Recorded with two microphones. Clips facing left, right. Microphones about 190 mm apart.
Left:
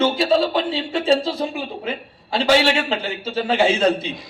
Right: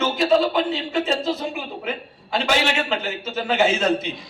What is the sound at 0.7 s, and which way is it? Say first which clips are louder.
A man's voice: left 4 dB; 30° left (ahead or behind).